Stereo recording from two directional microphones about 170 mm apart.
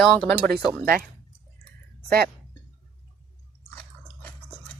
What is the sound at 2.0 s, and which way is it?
Speech, 65° right (ahead or behind).